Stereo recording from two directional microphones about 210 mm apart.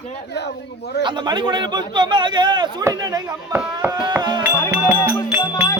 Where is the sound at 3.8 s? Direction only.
10° right (ahead or behind).